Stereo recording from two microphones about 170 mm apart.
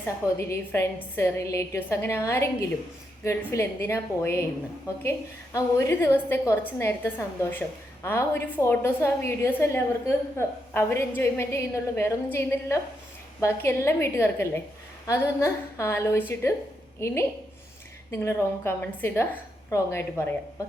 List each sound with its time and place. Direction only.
0.3 s a woman's voice: 15° left (ahead or behind)
5.5 s a woman's voice: 15° left (ahead or behind)
18.1 s a woman's voice: 15° left (ahead or behind)